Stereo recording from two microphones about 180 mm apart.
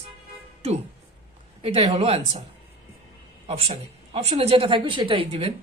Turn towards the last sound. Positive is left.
turn(degrees=-30)  # may be behind; listen again after turning